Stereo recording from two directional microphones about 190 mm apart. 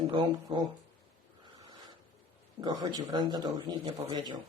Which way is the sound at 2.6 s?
20° right (ahead or behind).